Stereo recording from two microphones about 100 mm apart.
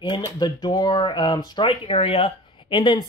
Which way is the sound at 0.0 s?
50° left (ahead or behind).